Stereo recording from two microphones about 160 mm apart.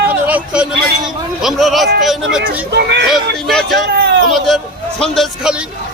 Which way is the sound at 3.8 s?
80° right.